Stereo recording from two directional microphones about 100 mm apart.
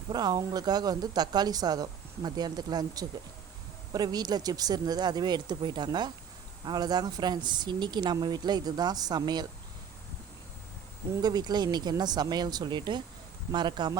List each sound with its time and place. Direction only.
0.1 s a woman's voice: 40° right (ahead or behind)
11.2 s a woman's voice: 40° right (ahead or behind)